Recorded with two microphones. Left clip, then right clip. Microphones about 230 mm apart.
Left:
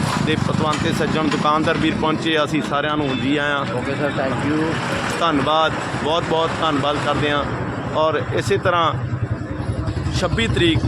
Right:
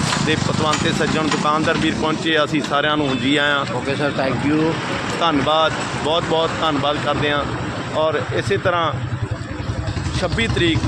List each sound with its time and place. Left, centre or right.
0.9 s speech: centre
3.8 s speech: right
5.2 s speech: centre
10.2 s speech: centre